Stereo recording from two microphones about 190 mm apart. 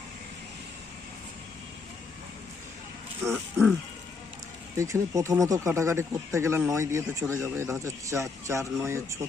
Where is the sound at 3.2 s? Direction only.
5° right (ahead or behind).